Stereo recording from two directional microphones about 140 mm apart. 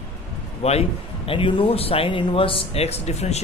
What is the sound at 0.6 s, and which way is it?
A man's voice, 45° left (ahead or behind).